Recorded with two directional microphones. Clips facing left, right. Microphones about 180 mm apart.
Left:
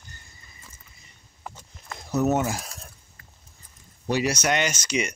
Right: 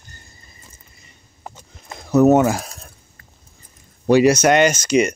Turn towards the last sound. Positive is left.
turn(degrees=-45)  # may be behind; listen again after turning